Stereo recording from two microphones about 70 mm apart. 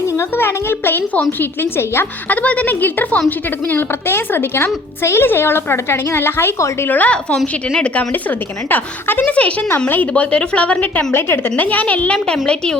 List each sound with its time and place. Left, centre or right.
0.2 s a woman's voice: left
2.3 s a woman's voice: left
8.7 s a woman's voice: left; by 12.7 s centre